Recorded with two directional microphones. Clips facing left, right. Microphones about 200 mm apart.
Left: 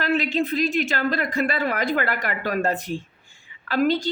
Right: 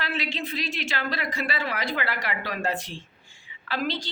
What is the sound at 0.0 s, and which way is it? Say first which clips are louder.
A woman's voice: left 9 dB; 50° left (ahead or behind).